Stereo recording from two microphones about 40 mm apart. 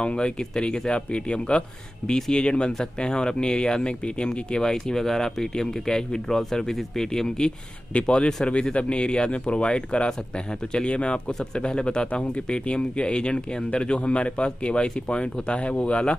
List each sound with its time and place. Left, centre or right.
0.0 s speech: left
2.0 s speech: centre
2.3 s speech: left
7.9 s speech: left